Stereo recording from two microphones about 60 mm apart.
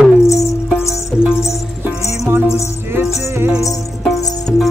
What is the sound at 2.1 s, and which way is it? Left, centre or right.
Music, right.